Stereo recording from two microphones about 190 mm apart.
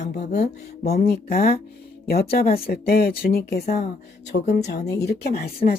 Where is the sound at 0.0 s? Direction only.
65° left (ahead or behind).